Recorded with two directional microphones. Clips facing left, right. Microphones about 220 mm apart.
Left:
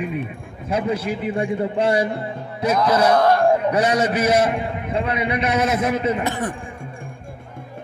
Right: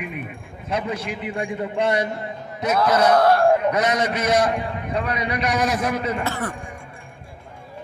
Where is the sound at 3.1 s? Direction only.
5° right (ahead or behind).